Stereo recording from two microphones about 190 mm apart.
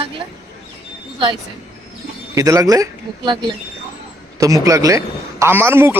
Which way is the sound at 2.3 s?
15° right (ahead or behind).